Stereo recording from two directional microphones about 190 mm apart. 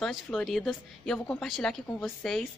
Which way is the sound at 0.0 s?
5° left (ahead or behind).